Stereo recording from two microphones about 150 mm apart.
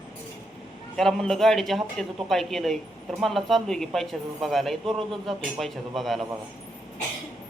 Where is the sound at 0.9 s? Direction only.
5° left (ahead or behind).